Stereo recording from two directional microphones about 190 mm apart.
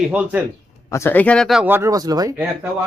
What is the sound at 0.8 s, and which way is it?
Speech, 15° left (ahead or behind).